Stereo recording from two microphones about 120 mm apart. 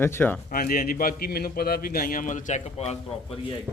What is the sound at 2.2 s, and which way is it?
Speech, 85° left.